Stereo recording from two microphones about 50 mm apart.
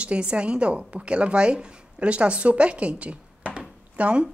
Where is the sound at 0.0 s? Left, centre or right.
Right.